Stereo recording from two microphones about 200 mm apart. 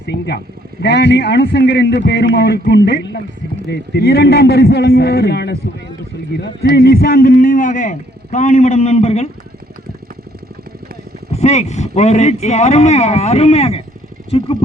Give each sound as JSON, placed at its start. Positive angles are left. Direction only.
{"t": 0.0, "sound": "a man's voice", "side_deg": 55}
{"t": 11.3, "sound": "a man's voice", "side_deg": 35}